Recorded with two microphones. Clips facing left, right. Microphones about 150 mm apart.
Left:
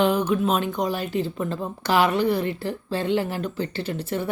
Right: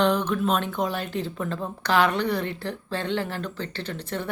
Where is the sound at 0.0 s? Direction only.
5° left (ahead or behind).